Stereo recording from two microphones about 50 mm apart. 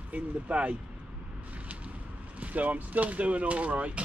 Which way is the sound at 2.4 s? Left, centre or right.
Right.